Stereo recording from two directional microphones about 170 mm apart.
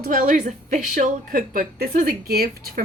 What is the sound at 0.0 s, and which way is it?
A woman's voice, 55° right (ahead or behind).